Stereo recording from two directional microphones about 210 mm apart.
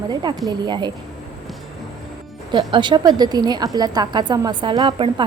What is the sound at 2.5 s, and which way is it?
A woman's voice, 20° right (ahead or behind).